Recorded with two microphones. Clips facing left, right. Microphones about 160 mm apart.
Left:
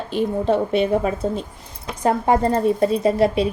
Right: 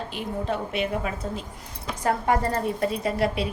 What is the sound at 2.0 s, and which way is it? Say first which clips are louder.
A woman's voice: left 6 dB; 25° left (ahead or behind).